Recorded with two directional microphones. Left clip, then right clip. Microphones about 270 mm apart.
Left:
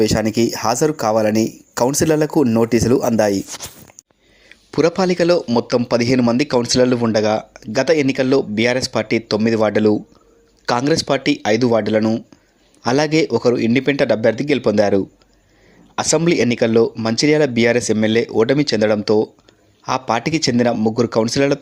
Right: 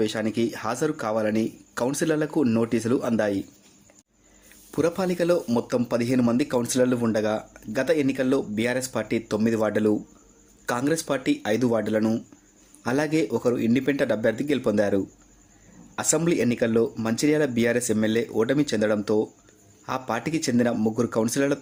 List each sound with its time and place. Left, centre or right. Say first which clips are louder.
0.0 s speech: left 9 dB; left
4.4 s speech: left 8 dB; centre